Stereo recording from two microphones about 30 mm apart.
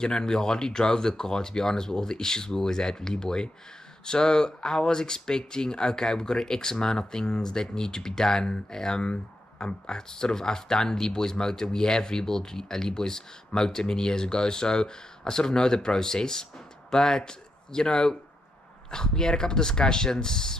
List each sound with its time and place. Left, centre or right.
0.0 s speech: left
9.0 s speech: left
9.8 s speech: left